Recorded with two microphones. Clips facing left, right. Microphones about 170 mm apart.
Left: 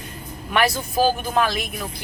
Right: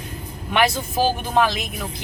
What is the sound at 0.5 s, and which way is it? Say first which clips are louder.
Speech: right 1 dB; 25° right (ahead or behind).